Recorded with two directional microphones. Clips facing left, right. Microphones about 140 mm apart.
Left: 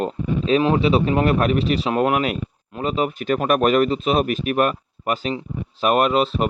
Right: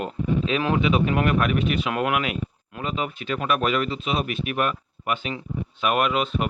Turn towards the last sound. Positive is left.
turn(degrees=35)  # may be behind; listen again after turning